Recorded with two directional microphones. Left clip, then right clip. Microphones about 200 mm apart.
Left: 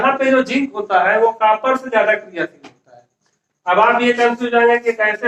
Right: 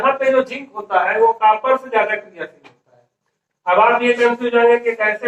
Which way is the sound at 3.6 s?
25° left (ahead or behind).